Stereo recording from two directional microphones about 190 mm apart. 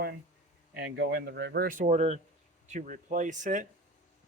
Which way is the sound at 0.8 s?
65° right (ahead or behind).